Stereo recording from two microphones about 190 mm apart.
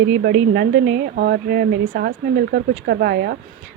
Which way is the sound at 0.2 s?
55° right (ahead or behind).